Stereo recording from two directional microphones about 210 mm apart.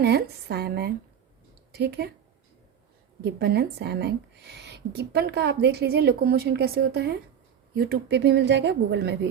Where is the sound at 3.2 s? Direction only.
50° right (ahead or behind).